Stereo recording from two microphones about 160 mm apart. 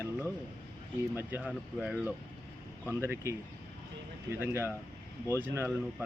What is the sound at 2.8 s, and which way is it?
Speech, 15° right (ahead or behind).